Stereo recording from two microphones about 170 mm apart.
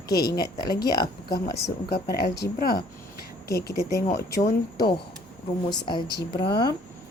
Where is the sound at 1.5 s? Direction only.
75° left (ahead or behind).